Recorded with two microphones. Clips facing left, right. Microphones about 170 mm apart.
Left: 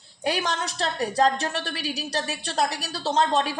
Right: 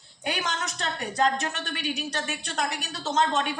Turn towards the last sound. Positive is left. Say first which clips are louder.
# left 3 dB
turn(degrees=35)  # may be behind; listen again after turning